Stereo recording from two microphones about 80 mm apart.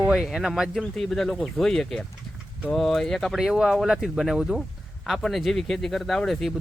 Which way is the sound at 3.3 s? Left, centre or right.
Centre.